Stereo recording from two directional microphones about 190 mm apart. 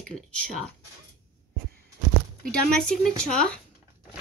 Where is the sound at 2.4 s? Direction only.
5° left (ahead or behind).